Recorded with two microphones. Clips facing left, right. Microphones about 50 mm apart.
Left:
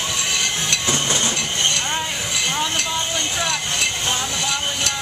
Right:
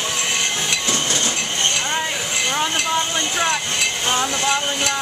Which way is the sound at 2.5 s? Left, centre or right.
Right.